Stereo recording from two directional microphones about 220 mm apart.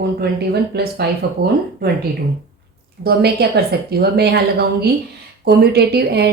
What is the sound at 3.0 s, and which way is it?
A woman's voice, 45° right (ahead or behind).